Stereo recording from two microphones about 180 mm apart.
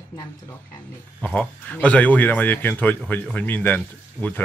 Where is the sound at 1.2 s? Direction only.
10° left (ahead or behind).